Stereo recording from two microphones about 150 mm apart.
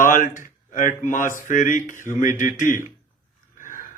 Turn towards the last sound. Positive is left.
turn(degrees=60)  # may be behind; listen again after turning